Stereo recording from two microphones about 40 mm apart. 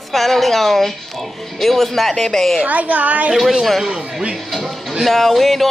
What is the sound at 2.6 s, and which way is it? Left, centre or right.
Speech, right.